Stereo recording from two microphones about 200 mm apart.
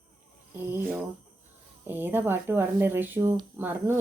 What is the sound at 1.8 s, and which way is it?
Speech, 10° right (ahead or behind).